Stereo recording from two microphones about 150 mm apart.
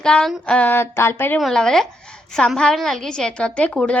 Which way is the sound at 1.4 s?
Centre (ahead or behind).